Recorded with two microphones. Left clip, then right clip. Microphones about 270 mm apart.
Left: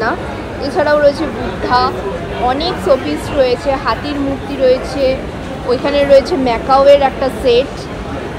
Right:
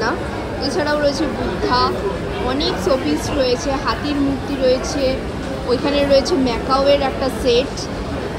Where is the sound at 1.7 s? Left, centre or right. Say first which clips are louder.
Left 5 dB; centre.